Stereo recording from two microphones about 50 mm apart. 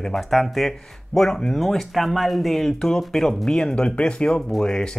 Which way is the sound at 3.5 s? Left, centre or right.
Centre.